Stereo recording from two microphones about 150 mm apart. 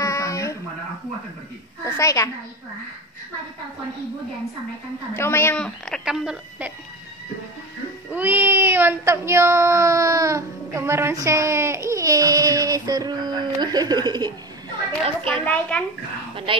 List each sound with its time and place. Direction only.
0.0 s a sound: 20° left (ahead or behind)
2.0 s a woman's voice: 20° left (ahead or behind)
5.1 s a woman's voice: 15° left (ahead or behind); by 6.7 s 5° right (ahead or behind)
8.1 s speech: 15° right (ahead or behind); by 14.3 s 30° right (ahead or behind)
14.9 s a child's voice: 10° left (ahead or behind)
16.5 s speech: 35° right (ahead or behind)